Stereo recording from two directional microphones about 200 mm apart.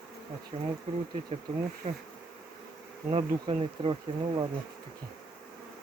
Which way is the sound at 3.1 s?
25° right (ahead or behind).